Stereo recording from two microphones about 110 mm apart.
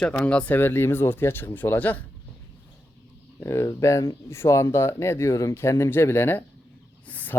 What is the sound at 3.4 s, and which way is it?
Speech, 25° left (ahead or behind).